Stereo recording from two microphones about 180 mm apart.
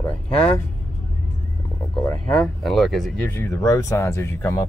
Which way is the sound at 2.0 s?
15° left (ahead or behind).